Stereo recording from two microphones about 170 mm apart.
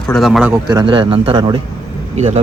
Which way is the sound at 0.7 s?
25° right (ahead or behind).